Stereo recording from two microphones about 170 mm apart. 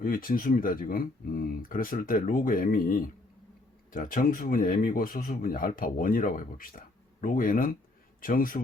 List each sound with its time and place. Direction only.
0.0 s speech: 55° left (ahead or behind)